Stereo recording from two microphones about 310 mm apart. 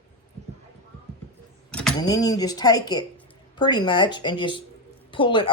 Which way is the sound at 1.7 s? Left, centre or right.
Centre.